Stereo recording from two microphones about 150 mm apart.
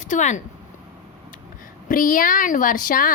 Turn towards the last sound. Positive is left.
turn(degrees=65)  # may be behind; listen again after turning